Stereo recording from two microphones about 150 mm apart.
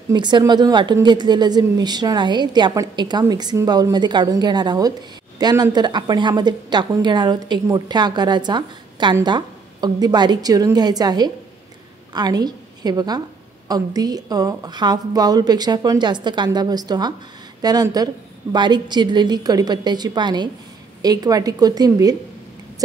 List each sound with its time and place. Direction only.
0.1 s a woman's voice: 30° right (ahead or behind)